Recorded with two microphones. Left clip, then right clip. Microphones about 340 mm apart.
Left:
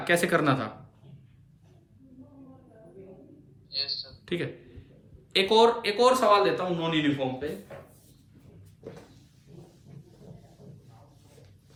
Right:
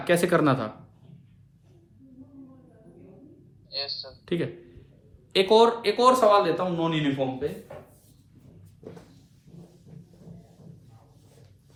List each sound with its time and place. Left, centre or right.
0.0 s speech: centre
3.7 s a sound: centre
5.3 s a man's voice: centre